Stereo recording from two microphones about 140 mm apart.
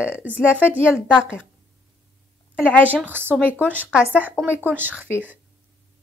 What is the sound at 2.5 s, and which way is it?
Speech, 15° left (ahead or behind).